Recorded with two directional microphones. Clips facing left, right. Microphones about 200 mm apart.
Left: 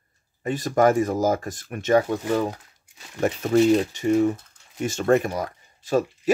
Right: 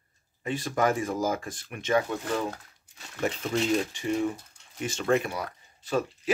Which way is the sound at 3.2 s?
45° left (ahead or behind).